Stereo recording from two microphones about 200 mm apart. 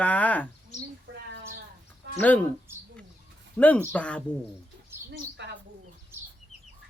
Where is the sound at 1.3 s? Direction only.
45° right (ahead or behind).